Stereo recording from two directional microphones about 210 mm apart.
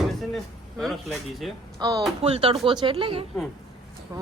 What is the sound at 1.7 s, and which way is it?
A woman's voice, 20° right (ahead or behind).